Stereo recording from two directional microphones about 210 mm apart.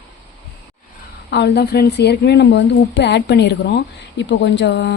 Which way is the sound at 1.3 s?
55° left (ahead or behind).